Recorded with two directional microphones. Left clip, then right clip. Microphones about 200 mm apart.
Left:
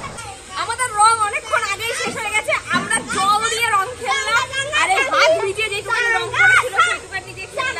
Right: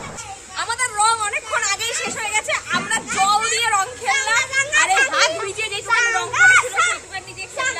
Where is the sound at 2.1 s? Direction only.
10° right (ahead or behind).